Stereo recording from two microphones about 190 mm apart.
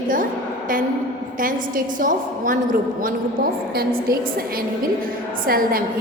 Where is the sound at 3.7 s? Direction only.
50° right (ahead or behind).